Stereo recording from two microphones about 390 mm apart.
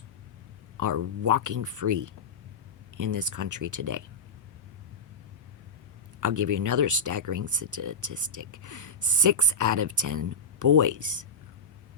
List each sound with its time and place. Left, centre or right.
0.8 s speech: right
6.1 s speech: right